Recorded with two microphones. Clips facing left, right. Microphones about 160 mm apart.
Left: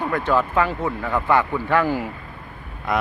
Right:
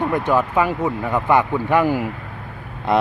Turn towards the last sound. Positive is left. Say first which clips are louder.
# right 5 dB
turn(degrees=-25)  # may be behind; listen again after turning